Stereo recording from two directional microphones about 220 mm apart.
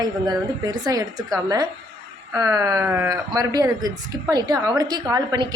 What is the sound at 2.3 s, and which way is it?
A woman's voice, 15° right (ahead or behind).